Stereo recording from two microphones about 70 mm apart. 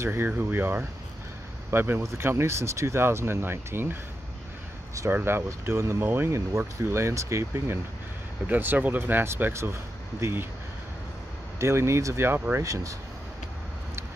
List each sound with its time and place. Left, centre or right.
0.0 s speech: right
5.1 s speech: right
6.9 s speech: right
8.5 s speech: right
11.5 s speech: right
12.6 s speech: right